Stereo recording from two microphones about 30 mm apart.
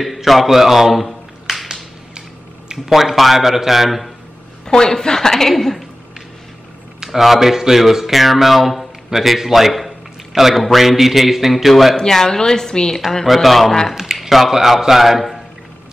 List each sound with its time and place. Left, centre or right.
0.0 s speech: centre
1.5 s a sound: centre
2.9 s speech: centre
4.6 s a woman's voice: left; by 5.9 s centre
7.1 s speech: centre
12.0 s a woman's voice: centre
13.2 s speech: centre
14.3 s speech: centre